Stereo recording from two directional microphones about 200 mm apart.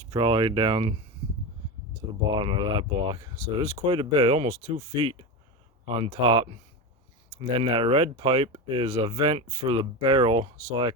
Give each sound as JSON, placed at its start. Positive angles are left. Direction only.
{"t": 0.1, "sound": "speech", "side_deg": -25}
{"t": 2.0, "sound": "speech", "side_deg": -25}